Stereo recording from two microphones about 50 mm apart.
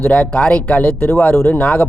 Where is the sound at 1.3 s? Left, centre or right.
Left.